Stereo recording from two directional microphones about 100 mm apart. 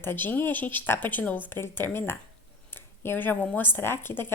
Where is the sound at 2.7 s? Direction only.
20° left (ahead or behind).